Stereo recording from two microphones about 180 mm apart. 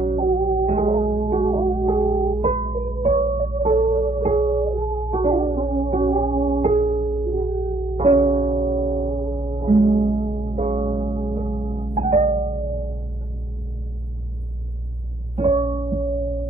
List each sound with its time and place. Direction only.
0.0 s music: 40° right (ahead or behind)
15.4 s music: 35° right (ahead or behind)